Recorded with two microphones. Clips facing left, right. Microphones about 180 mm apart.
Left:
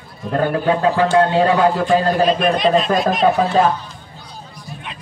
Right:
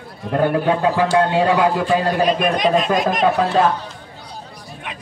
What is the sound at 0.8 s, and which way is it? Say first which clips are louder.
A man's voice: left 4 dB; 10° right (ahead or behind).